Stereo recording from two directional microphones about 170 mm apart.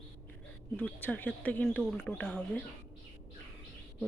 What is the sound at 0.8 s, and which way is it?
Speech, 10° left (ahead or behind).